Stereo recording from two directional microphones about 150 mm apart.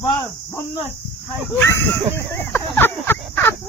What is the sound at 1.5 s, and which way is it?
Speech, 15° left (ahead or behind).